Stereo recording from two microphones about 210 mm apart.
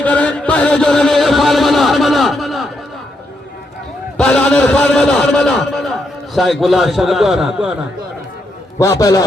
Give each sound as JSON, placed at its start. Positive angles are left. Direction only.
{"t": 0.0, "sound": "chant", "side_deg": 5}
{"t": 4.2, "sound": "a man's voice", "side_deg": 5}
{"t": 8.8, "sound": "a man's voice", "side_deg": 15}